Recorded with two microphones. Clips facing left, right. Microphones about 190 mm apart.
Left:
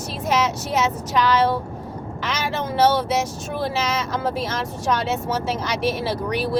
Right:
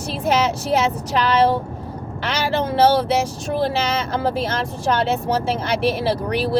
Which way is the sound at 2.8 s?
30° right (ahead or behind).